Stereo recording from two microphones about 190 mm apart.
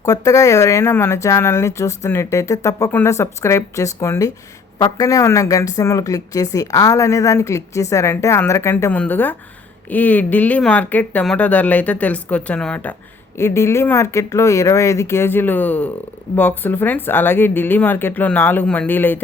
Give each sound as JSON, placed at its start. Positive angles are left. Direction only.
{"t": 0.0, "sound": "speech", "side_deg": 15}